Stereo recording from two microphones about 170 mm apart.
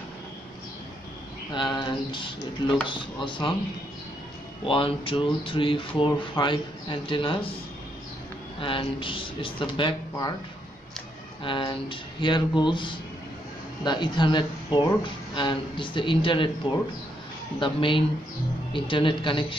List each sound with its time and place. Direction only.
1.5 s speech: 25° left (ahead or behind)
4.6 s speech: 30° left (ahead or behind)
8.5 s speech: 30° left (ahead or behind)
11.4 s speech: 30° left (ahead or behind)